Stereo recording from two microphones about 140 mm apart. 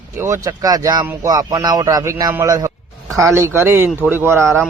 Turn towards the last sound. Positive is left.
turn(degrees=-15)  # may be behind; listen again after turning